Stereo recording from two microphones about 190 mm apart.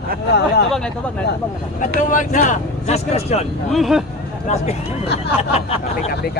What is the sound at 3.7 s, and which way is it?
Speech, centre (ahead or behind).